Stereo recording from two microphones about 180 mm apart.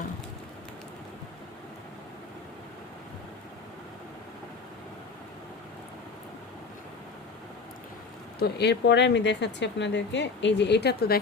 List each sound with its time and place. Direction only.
8.4 s speech: 65° left (ahead or behind)